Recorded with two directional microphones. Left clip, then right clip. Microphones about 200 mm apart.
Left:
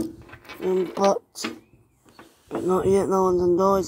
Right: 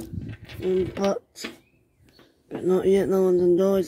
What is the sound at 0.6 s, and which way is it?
Speech, 20° left (ahead or behind).